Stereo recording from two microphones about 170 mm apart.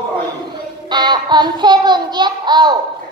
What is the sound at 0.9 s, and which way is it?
Child singing, 25° right (ahead or behind).